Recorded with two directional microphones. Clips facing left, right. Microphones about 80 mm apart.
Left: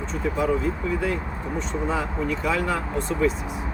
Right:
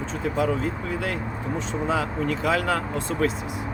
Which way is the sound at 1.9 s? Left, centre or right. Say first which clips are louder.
Right 3 dB; right.